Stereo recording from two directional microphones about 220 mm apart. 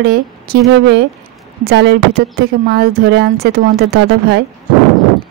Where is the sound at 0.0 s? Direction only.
50° right (ahead or behind).